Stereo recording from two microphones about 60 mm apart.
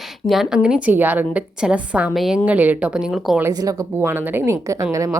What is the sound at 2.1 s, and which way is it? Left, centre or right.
Speech, centre.